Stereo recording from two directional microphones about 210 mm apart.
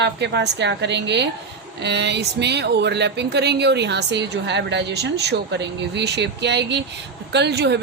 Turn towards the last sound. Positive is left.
turn(degrees=-55)  # may be behind; listen again after turning